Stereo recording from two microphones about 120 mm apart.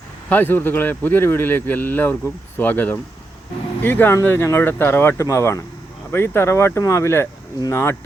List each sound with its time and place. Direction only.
0.3 s speech: 15° left (ahead or behind)